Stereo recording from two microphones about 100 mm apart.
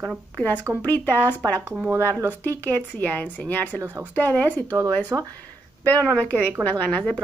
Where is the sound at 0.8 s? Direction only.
20° left (ahead or behind).